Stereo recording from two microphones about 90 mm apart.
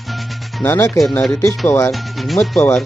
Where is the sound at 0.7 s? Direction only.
35° left (ahead or behind).